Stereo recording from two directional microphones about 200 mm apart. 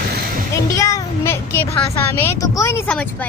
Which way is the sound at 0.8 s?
15° left (ahead or behind).